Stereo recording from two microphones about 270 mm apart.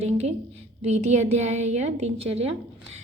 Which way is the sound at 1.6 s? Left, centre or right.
Right.